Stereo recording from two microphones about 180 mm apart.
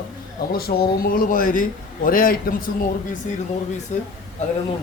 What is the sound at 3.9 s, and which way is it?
Speech, 40° left (ahead or behind).